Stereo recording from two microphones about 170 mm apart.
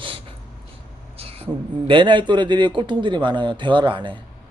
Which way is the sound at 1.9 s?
30° right (ahead or behind).